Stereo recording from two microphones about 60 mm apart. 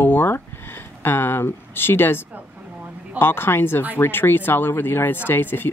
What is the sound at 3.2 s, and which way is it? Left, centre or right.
Speech, left.